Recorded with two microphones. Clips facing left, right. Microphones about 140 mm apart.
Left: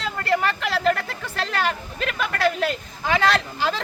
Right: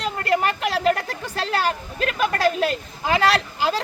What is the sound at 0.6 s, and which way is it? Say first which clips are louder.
Speech: right 1 dB; 40° right (ahead or behind).